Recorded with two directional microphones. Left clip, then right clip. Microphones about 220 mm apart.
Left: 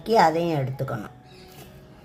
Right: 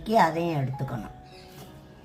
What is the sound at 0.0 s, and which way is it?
Speech, 40° left (ahead or behind).